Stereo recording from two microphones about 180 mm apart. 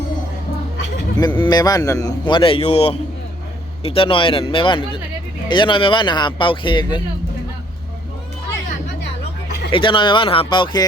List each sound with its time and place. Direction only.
1.1 s a man's voice: 25° left (ahead or behind)
9.7 s a man's voice: 25° left (ahead or behind)